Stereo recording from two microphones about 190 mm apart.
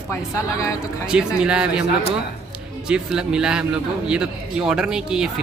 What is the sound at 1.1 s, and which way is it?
Speech, 5° right (ahead or behind).